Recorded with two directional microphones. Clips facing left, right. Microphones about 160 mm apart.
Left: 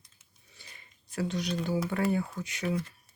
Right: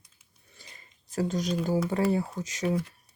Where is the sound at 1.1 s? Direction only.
45° right (ahead or behind).